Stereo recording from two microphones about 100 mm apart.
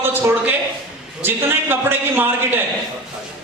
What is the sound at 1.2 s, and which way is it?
A man's voice, 20° right (ahead or behind).